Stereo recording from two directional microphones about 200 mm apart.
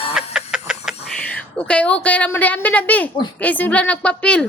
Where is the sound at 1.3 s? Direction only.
5° left (ahead or behind).